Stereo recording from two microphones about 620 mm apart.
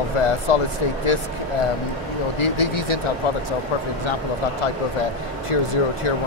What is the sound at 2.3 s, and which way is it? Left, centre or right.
Speech, left.